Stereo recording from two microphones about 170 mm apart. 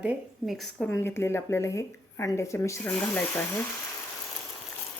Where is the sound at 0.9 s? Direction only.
15° left (ahead or behind).